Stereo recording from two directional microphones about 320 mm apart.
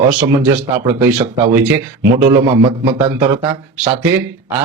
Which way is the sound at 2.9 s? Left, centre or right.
Centre.